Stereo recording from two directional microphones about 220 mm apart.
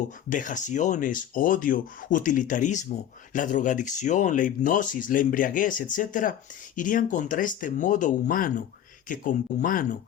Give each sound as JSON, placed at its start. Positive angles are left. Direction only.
{"t": 0.3, "sound": "speech", "side_deg": 35}